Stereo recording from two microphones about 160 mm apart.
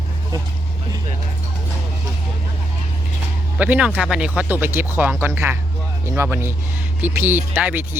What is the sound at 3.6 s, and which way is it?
Speech, 10° right (ahead or behind).